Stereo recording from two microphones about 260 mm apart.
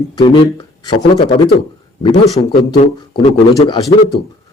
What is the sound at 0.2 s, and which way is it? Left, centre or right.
Speech, centre.